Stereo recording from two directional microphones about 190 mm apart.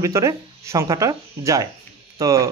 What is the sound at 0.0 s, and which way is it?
Speech, 15° right (ahead or behind).